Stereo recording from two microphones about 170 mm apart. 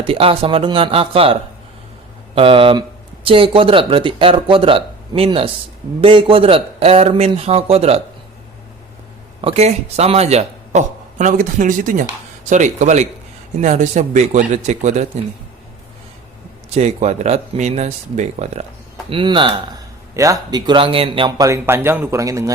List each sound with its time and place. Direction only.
0.0 s a man's voice: 30° right (ahead or behind)
9.4 s a man's voice: 35° right (ahead or behind)
16.7 s a man's voice: 40° right (ahead or behind)
19.1 s speech: 30° right (ahead or behind)
20.1 s speech: 20° right (ahead or behind)